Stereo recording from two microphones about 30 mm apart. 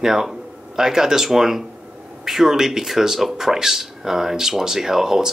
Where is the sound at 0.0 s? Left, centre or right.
Centre.